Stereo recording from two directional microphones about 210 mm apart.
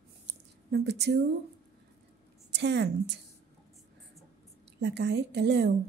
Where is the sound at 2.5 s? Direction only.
55° right (ahead or behind).